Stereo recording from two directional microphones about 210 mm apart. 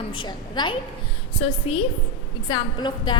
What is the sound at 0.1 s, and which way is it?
A woman's voice, 20° left (ahead or behind).